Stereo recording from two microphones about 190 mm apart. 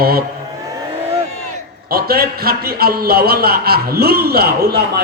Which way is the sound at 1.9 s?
55° right (ahead or behind).